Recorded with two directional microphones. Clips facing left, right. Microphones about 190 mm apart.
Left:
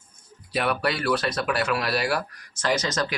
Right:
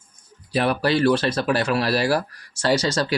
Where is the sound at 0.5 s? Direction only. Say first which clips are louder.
Right 5 dB; 30° right (ahead or behind).